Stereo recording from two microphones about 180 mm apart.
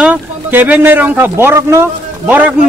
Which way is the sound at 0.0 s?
10° right (ahead or behind).